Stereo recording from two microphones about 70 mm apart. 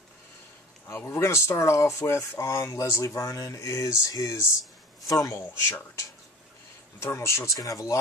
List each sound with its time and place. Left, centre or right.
0.8 s speech: left
7.0 s speech: left